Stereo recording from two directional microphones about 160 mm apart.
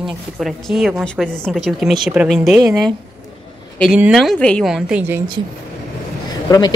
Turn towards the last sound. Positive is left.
turn(degrees=25)  # may be behind; listen again after turning